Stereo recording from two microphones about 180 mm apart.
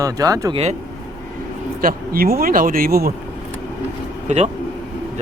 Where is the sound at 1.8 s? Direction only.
55° right (ahead or behind).